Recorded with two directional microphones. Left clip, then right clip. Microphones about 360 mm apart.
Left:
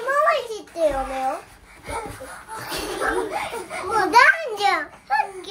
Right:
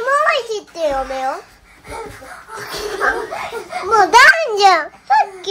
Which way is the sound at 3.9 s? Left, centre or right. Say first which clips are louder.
Right 7 dB; centre.